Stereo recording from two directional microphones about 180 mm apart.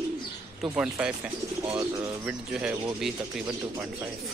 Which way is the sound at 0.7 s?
5° right (ahead or behind).